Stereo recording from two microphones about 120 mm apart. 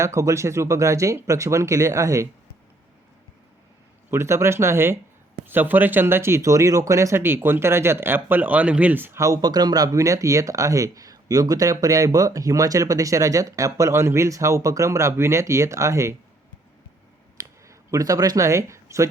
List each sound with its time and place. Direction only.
0.0 s speech: 25° right (ahead or behind)
4.1 s speech: 20° right (ahead or behind)
17.3 s a sound: 25° right (ahead or behind)